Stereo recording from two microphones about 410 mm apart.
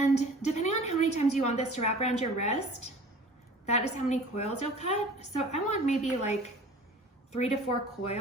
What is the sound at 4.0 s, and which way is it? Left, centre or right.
Speech, centre.